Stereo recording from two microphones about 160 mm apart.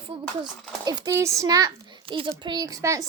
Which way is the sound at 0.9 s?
25° right (ahead or behind).